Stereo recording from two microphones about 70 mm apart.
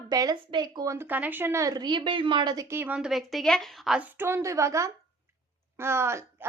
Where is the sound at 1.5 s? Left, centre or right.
Right.